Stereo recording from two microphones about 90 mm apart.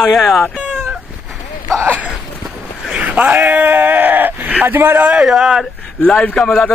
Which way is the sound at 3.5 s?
20° right (ahead or behind).